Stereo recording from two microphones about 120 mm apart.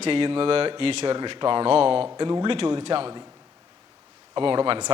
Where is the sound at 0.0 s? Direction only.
50° right (ahead or behind).